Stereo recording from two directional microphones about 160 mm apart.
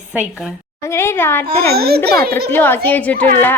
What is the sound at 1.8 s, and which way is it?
Speech, 80° right.